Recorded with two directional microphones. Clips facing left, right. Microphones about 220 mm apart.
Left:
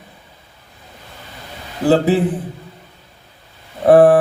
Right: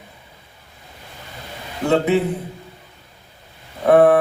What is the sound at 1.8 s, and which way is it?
Speech, 30° left (ahead or behind).